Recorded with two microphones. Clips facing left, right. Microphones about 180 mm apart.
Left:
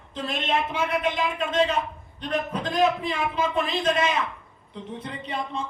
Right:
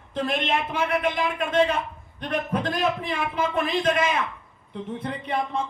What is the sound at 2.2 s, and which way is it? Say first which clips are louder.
A man's voice: right 1 dB; 55° right (ahead or behind).